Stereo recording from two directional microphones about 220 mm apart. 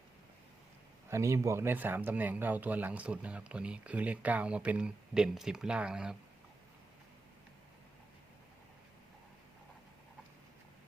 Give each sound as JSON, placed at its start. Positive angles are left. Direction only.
{"t": 1.1, "sound": "speech", "side_deg": -15}